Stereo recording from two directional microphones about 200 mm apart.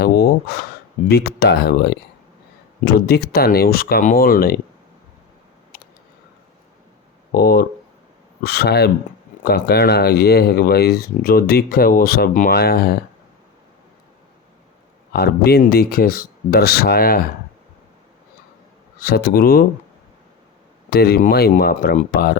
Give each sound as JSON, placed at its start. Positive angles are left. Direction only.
{"t": 0.0, "sound": "speech", "side_deg": 55}
{"t": 5.7, "sound": "a sound", "side_deg": 50}
{"t": 7.3, "sound": "speech", "side_deg": 50}
{"t": 15.1, "sound": "speech", "side_deg": 50}
{"t": 18.9, "sound": "speech", "side_deg": 50}
{"t": 20.9, "sound": "speech", "side_deg": 50}